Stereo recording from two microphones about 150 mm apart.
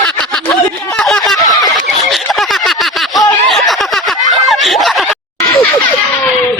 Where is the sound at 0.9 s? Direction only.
5° left (ahead or behind).